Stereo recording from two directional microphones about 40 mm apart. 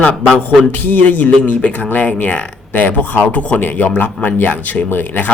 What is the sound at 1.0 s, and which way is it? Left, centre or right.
Speech, left.